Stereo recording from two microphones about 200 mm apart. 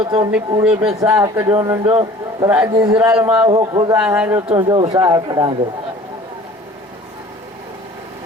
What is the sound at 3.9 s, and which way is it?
Speech, 5° right (ahead or behind).